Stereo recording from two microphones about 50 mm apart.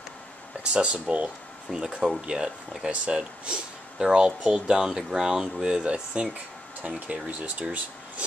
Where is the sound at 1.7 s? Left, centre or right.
Centre; by 8.3 s right.